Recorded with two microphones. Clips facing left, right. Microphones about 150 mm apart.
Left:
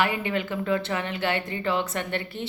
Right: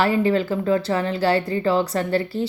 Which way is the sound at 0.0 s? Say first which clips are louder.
Right 7 dB; 35° right (ahead or behind).